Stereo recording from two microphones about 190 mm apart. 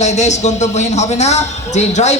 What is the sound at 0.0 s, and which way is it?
A woman's voice, 35° left (ahead or behind).